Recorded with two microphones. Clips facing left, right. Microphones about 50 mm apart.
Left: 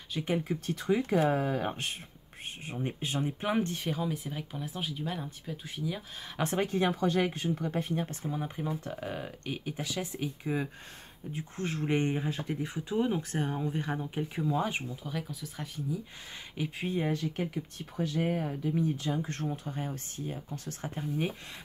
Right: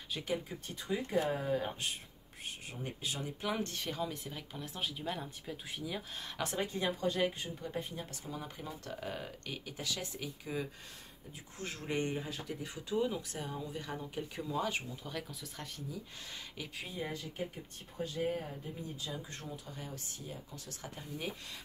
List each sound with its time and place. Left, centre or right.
0.4 s speech: left
2.6 s speech: left; by 6.0 s centre
6.5 s speech: left
8.0 s speech: left
8.3 s speech: left
14.3 s speech: centre
15.0 s speech: centre
16.5 s speech: left
17.0 s speech: left
19.4 s speech: left